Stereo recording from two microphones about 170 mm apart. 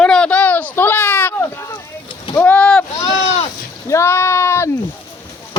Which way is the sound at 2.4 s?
10° left (ahead or behind).